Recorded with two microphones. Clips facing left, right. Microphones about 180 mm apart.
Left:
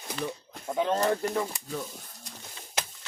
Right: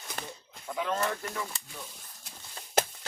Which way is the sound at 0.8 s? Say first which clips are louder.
Left 6 dB; 35° left (ahead or behind).